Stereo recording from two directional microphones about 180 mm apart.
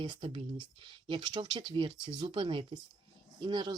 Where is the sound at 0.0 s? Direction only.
30° right (ahead or behind).